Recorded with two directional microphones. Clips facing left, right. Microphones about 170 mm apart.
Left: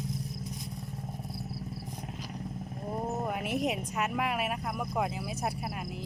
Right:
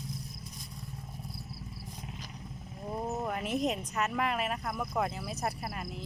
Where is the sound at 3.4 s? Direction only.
60° left (ahead or behind).